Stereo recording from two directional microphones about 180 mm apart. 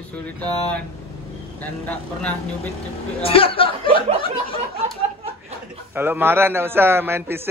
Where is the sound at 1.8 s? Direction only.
10° left (ahead or behind).